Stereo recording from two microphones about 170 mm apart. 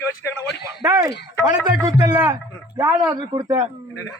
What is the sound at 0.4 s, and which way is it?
Speech, 75° left (ahead or behind).